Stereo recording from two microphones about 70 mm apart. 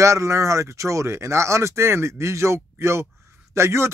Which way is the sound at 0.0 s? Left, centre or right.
Right.